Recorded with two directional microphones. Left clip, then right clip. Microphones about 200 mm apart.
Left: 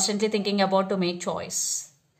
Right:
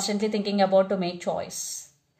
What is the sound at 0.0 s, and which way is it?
A woman's voice, 40° left (ahead or behind).